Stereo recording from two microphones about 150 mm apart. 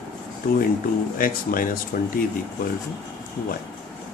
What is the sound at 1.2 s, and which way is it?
Speech, 70° left (ahead or behind).